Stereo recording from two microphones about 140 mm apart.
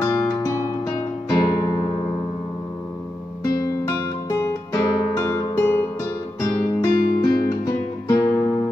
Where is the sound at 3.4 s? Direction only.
25° left (ahead or behind).